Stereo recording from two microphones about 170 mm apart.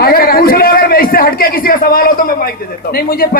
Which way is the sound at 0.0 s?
60° left (ahead or behind).